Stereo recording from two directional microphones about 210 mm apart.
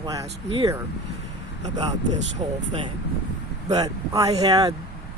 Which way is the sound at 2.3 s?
25° right (ahead or behind).